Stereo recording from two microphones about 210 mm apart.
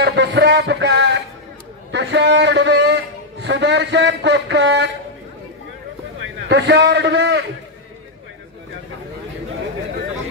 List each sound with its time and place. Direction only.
0.0 s music: 55° right (ahead or behind)
1.9 s a man's voice: 55° right (ahead or behind)
6.2 s a man's voice: 55° right (ahead or behind)